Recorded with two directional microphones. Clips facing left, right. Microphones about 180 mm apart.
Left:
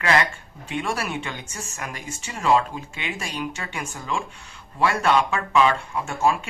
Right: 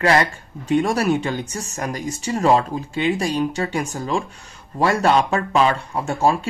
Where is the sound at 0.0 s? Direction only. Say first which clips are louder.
Right 4 dB; 35° right (ahead or behind).